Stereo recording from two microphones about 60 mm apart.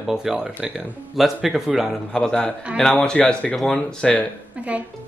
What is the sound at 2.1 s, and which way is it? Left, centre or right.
A man's voice, centre.